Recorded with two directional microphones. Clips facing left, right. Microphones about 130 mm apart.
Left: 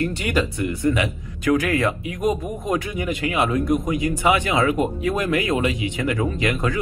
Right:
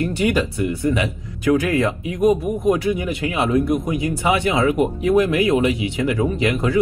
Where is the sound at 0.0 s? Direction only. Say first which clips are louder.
Right 3 dB; 20° right (ahead or behind).